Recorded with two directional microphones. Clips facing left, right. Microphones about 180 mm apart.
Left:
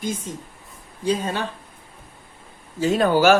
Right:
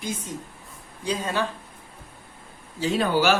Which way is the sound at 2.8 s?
45° left (ahead or behind).